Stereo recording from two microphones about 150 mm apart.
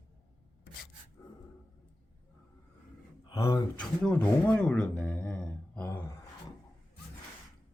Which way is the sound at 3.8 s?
10° left (ahead or behind).